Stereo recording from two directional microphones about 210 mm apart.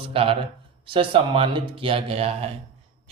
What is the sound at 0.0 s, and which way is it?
A man's voice, 25° right (ahead or behind).